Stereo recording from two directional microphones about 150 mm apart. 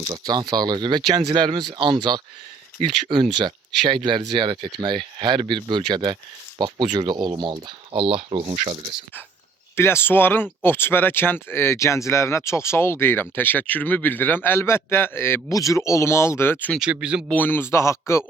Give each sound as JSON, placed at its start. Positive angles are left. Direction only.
{"t": 0.1, "sound": "speech", "side_deg": -30}
{"t": 9.7, "sound": "speech", "side_deg": 15}
{"t": 16.8, "sound": "speech", "side_deg": -5}
{"t": 17.2, "sound": "speech", "side_deg": 10}